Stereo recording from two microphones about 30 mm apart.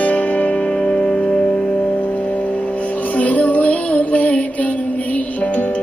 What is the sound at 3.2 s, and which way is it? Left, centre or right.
Music, left.